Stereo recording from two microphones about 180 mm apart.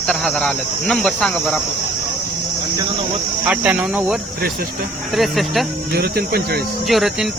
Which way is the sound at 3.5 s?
10° right (ahead or behind).